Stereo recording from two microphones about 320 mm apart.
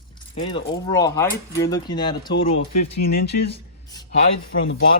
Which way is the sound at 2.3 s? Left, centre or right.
Left.